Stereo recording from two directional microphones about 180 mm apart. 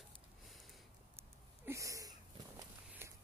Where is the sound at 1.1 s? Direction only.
15° right (ahead or behind).